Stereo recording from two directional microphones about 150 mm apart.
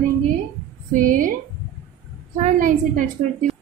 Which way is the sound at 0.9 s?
60° right (ahead or behind).